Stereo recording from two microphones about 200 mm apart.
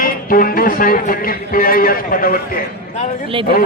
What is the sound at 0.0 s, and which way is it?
Speech, 45° left (ahead or behind).